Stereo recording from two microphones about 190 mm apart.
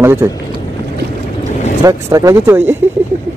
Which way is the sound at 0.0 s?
10° right (ahead or behind).